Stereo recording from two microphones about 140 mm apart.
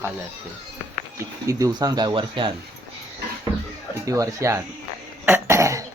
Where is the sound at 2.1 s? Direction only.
35° right (ahead or behind).